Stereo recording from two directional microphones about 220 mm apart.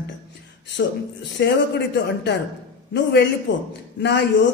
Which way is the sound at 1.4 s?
50° left (ahead or behind).